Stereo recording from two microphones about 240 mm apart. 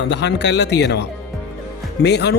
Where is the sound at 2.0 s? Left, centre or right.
Left.